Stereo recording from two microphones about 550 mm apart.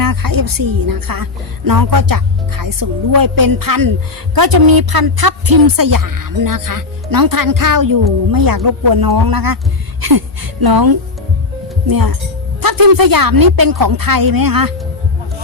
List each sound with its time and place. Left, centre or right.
0.0 s a woman's voice: right